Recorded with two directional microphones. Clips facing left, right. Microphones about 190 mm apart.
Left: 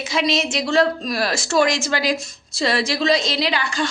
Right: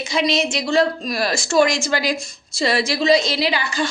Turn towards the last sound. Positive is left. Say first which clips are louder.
# right 1 dB
turn(degrees=0)  # may be behind; listen again after turning